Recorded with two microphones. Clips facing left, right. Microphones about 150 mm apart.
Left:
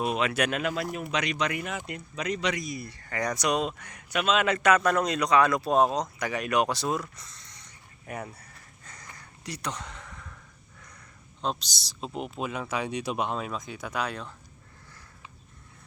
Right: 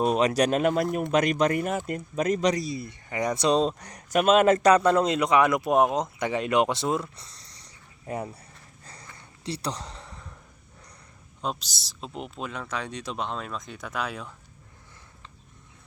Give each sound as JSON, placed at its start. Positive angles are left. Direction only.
{"t": 0.0, "sound": "speech", "side_deg": -40}
{"t": 8.4, "sound": "a sound", "side_deg": -30}
{"t": 11.4, "sound": "speech", "side_deg": -5}